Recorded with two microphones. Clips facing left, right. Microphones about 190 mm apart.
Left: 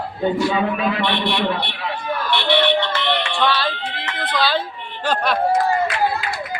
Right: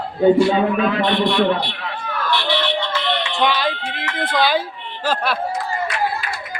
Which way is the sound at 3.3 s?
15° right (ahead or behind).